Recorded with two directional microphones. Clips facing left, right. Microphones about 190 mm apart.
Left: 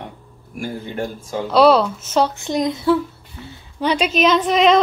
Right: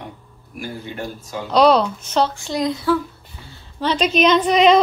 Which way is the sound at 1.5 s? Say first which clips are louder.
Left 1 dB; 5° left (ahead or behind).